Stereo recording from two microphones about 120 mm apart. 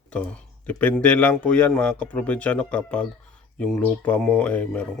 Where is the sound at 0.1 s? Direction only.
10° left (ahead or behind).